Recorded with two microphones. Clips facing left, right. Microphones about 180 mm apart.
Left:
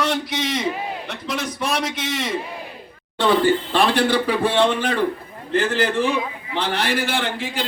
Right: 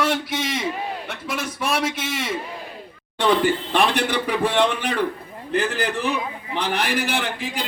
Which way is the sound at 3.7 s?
15° right (ahead or behind).